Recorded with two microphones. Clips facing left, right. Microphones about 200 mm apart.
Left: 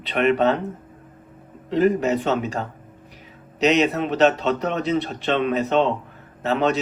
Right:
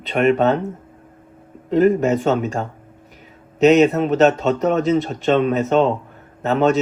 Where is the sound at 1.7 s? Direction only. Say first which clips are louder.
Right 4 dB; 45° right (ahead or behind).